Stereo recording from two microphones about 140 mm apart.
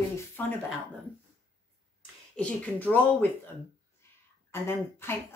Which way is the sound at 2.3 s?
10° left (ahead or behind).